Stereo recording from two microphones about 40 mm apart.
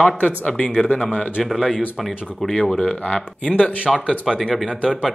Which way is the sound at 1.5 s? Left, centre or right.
Centre.